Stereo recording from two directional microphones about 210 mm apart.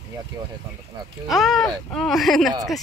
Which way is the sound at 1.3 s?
Centre (ahead or behind).